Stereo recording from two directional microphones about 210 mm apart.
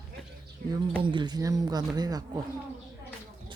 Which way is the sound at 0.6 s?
45° right (ahead or behind).